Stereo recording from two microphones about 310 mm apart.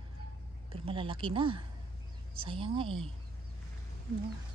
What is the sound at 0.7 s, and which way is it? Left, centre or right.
Speech, centre.